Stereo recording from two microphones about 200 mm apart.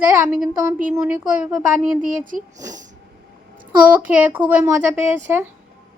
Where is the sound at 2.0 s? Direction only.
40° right (ahead or behind).